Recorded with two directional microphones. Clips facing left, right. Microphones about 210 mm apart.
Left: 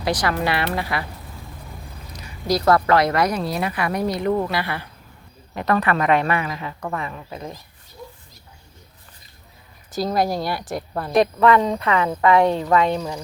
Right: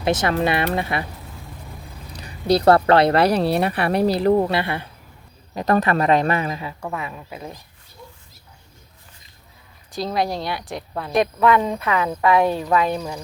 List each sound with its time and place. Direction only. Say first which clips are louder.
0.0 s speech: right 2 dB; 25° right (ahead or behind)
2.1 s speech: right 4 dB; 30° right (ahead or behind)
3.3 s speech: right 6 dB; 70° right (ahead or behind)
3.6 s speech: right 4 dB; 35° right (ahead or behind)
5.5 s speech: right 2 dB; 40° right (ahead or behind)
6.6 s speech: left 1 dB; 10° right (ahead or behind)
9.9 s speech: left 2 dB; centre (ahead or behind)